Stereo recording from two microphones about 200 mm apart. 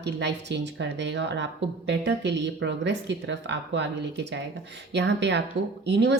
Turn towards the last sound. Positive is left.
turn(degrees=-60)  # may be behind; listen again after turning